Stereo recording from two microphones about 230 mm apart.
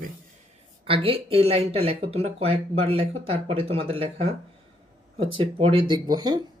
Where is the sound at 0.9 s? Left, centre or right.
Right.